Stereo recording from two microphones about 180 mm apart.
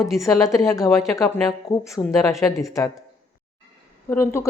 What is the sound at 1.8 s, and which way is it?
Speech, centre (ahead or behind).